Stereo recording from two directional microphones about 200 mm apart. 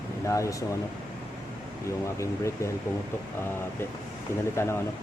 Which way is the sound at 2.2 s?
15° left (ahead or behind).